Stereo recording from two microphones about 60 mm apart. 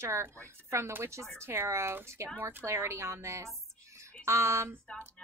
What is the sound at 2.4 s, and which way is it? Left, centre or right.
A woman's voice, right.